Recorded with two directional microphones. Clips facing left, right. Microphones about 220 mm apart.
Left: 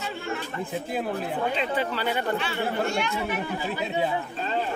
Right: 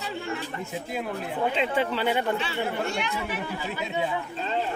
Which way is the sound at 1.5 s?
25° right (ahead or behind).